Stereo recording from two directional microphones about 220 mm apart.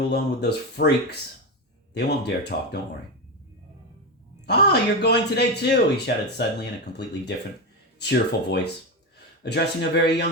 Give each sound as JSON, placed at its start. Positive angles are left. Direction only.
{"t": 0.1, "sound": "speech", "side_deg": 50}
{"t": 4.4, "sound": "speech", "side_deg": 50}